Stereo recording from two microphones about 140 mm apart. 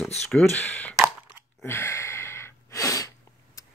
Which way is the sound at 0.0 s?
5° left (ahead or behind).